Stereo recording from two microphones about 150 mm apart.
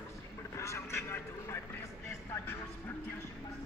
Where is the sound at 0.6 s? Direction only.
20° left (ahead or behind).